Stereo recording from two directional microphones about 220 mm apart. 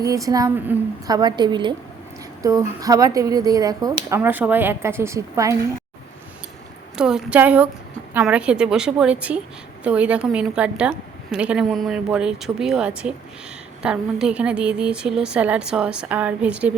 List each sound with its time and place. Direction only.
0.0 s a woman's voice: 15° right (ahead or behind)
6.9 s a woman's voice: 5° right (ahead or behind)